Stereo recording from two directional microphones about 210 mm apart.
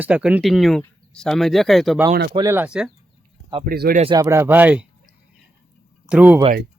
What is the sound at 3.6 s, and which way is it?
Speech, 45° right (ahead or behind).